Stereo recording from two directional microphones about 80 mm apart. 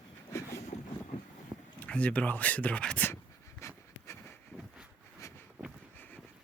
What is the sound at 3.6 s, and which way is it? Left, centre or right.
Pant, left.